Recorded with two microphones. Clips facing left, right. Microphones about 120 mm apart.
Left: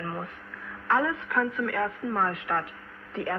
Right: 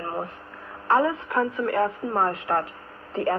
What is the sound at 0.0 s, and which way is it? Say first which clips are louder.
Speech: right 4 dB; 30° right (ahead or behind).